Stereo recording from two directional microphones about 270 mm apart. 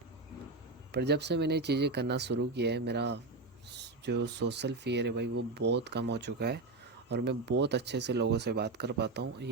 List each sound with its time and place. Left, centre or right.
0.9 s speech: right